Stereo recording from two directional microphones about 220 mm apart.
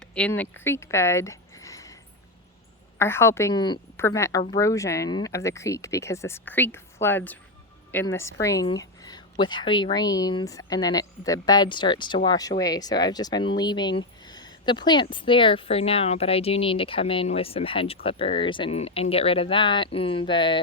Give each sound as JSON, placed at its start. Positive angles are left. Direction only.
{"t": 0.1, "sound": "speech", "side_deg": 5}
{"t": 3.0, "sound": "a woman's voice", "side_deg": 10}